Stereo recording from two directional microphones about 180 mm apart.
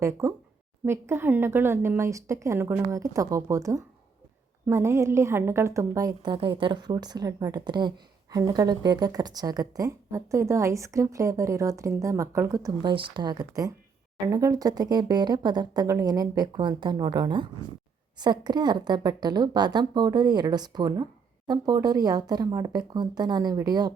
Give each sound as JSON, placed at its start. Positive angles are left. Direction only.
{"t": 0.0, "sound": "a woman's voice", "side_deg": -15}